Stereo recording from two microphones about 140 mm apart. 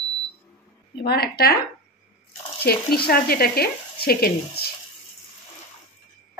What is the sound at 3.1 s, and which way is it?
Speech, 90° left.